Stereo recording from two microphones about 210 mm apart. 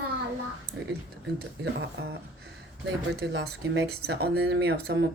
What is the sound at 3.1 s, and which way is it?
Speech, 50° right (ahead or behind).